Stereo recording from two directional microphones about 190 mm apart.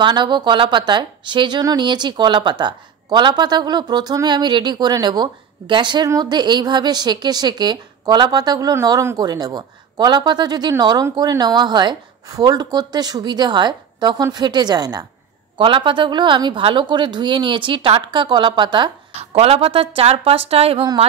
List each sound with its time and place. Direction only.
0.0 s speech: 25° right (ahead or behind)